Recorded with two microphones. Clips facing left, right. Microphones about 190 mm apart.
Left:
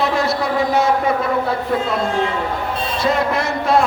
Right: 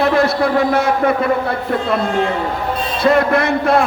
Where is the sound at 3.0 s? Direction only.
60° right (ahead or behind).